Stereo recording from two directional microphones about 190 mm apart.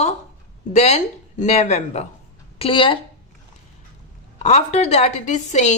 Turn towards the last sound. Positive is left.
turn(degrees=40)  # may be behind; listen again after turning